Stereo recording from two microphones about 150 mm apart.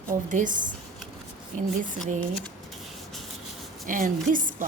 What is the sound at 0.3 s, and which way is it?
Speech, 60° right (ahead or behind).